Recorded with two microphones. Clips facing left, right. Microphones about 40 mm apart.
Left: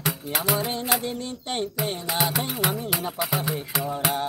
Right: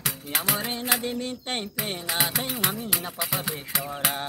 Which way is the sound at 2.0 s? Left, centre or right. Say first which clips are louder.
Left 1 dB; centre.